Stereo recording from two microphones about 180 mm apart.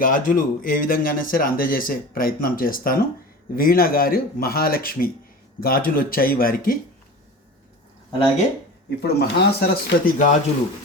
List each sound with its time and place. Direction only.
0.0 s speech: 50° left (ahead or behind)
9.0 s speech: 70° left (ahead or behind)